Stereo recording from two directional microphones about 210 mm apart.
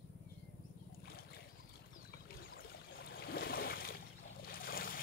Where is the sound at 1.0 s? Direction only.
45° left (ahead or behind).